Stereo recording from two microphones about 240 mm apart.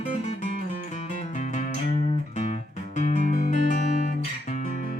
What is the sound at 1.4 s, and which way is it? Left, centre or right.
Music, left.